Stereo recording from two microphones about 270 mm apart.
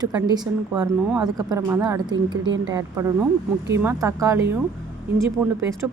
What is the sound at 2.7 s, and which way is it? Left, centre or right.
Speech, centre.